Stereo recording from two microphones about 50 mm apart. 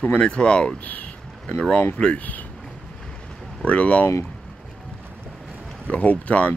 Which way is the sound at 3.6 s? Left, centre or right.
Left.